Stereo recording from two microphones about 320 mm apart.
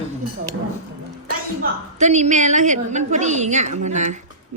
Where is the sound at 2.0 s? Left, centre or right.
Right.